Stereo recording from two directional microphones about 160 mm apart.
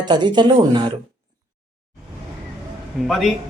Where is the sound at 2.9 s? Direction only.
Centre (ahead or behind).